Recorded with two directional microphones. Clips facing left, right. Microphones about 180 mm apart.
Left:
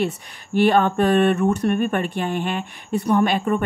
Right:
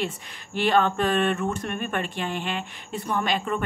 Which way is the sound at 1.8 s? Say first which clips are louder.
Left 7 dB; 50° left (ahead or behind).